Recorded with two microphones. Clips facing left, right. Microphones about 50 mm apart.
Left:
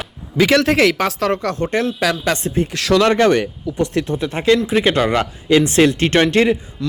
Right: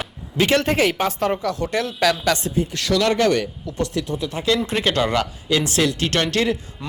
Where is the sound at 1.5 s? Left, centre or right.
Left.